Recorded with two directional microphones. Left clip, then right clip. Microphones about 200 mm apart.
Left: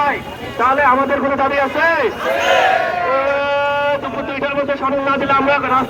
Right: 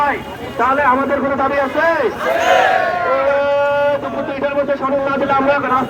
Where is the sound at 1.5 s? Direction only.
60° right (ahead or behind).